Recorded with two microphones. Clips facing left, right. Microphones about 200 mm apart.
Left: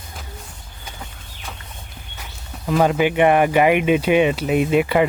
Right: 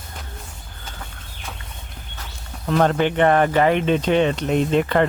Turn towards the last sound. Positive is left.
turn(degrees=10)  # may be behind; listen again after turning